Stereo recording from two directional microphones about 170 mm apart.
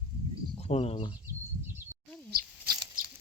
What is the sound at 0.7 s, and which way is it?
Speech, 35° left (ahead or behind).